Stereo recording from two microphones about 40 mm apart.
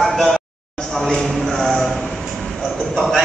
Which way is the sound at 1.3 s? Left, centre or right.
Centre.